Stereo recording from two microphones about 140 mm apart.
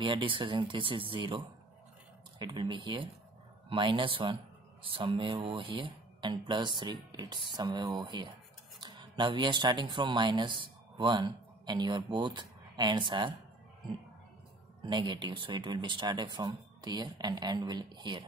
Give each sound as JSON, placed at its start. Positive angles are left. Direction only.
{"t": 0.0, "sound": "speech", "side_deg": -35}
{"t": 14.8, "sound": "speech", "side_deg": -30}